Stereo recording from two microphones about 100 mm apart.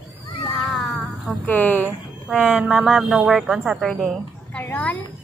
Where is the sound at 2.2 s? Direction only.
10° right (ahead or behind).